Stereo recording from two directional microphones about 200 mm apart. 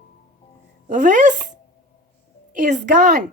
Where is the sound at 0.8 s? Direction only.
40° right (ahead or behind).